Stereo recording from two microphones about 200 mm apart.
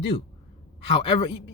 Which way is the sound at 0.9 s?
25° left (ahead or behind).